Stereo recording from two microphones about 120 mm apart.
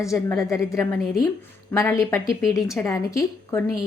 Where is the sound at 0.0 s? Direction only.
25° left (ahead or behind).